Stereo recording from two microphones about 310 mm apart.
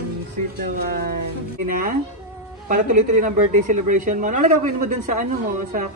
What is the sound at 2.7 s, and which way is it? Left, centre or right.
Speech, right.